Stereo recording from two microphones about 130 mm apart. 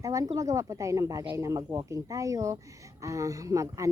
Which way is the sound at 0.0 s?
25° right (ahead or behind).